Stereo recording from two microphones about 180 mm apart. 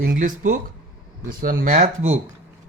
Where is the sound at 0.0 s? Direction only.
50° right (ahead or behind).